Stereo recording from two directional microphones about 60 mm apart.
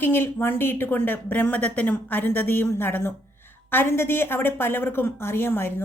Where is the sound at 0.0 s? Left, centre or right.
Left.